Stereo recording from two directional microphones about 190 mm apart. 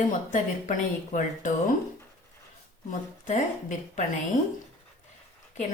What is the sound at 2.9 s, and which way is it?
A woman's voice, 40° left (ahead or behind).